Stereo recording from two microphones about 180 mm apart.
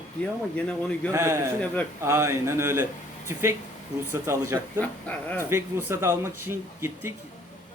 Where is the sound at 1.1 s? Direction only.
15° right (ahead or behind).